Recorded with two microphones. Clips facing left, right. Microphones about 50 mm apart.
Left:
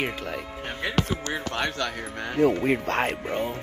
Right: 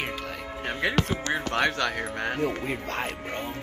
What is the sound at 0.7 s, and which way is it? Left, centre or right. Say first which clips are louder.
Speech: right 2 dB; right.